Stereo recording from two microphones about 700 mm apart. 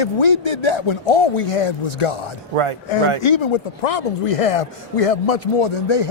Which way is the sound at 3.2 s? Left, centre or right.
Left.